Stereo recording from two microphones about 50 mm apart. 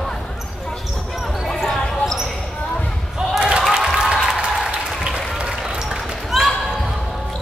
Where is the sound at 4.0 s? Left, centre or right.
Centre.